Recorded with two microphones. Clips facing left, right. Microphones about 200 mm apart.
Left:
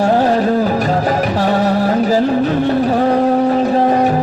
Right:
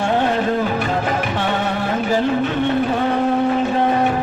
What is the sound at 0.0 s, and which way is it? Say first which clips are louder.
Music: left 5 dB; 35° left (ahead or behind).